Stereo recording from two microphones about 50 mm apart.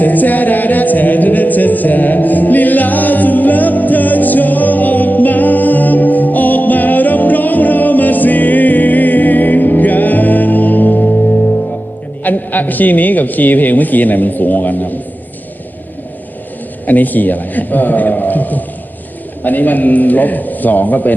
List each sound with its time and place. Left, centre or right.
0.0 s music: left
12.2 s a man's voice: left
16.8 s a man's voice: left